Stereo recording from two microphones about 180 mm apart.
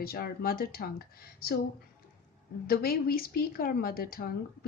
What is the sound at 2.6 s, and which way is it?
Speech, 55° left (ahead or behind).